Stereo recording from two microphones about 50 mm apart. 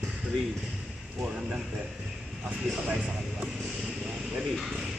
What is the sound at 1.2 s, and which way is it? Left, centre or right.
Speech, right.